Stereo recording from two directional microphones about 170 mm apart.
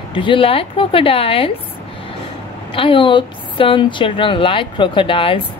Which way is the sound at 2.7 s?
30° left (ahead or behind).